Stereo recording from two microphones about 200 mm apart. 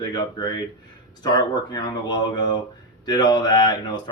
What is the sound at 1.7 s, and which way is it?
Speech, 20° left (ahead or behind).